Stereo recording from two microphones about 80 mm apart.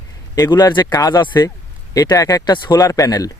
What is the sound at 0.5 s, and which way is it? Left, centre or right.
Speech, left.